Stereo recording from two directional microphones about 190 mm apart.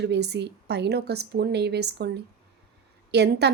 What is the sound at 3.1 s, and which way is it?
Speech, 60° right (ahead or behind).